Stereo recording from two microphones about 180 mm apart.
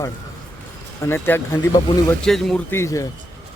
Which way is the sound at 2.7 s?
15° left (ahead or behind).